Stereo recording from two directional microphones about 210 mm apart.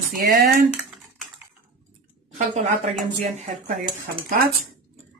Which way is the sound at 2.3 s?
35° right (ahead or behind).